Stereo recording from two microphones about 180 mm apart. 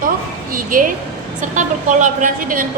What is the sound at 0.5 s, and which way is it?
A woman's voice, 50° right (ahead or behind).